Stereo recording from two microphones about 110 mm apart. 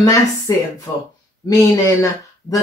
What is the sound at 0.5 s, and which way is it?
Speech, 35° left (ahead or behind).